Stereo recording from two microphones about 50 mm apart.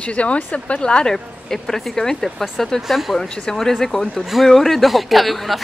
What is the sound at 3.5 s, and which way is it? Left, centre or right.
A woman's voice, centre.